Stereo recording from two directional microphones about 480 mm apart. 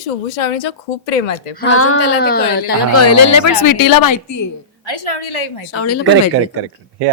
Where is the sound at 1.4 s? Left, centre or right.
Left.